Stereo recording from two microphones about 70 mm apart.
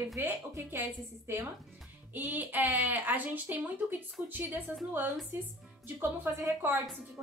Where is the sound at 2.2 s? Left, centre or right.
Right.